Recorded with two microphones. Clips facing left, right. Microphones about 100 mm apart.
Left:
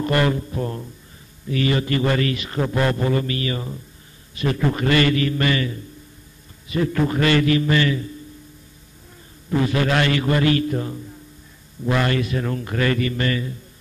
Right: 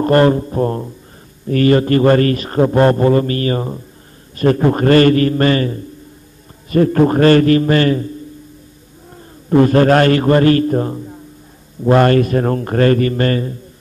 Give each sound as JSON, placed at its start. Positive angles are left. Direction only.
{"t": 0.0, "sound": "a man's voice", "side_deg": -40}
{"t": 9.5, "sound": "a man's voice", "side_deg": -45}